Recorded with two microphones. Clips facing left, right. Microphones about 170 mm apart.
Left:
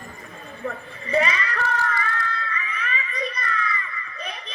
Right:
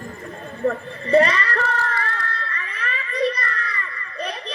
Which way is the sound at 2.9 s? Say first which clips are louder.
Right 9 dB; 35° right (ahead or behind).